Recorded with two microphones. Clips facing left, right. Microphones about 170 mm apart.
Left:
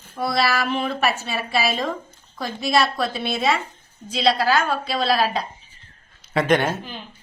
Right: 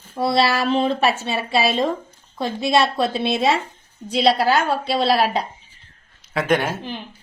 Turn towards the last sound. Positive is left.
turn(degrees=0)  # may be behind; listen again after turning